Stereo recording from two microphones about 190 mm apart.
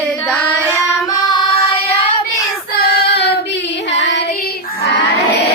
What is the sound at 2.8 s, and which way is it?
Child singing, 55° left (ahead or behind).